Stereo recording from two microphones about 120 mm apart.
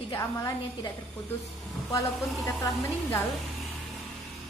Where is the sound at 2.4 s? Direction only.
25° left (ahead or behind).